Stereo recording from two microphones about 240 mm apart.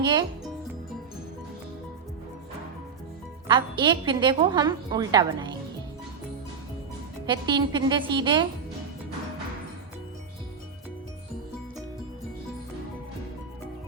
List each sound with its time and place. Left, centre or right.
0.0 s speech: centre
3.4 s a woman's voice: centre
7.3 s a woman's voice: centre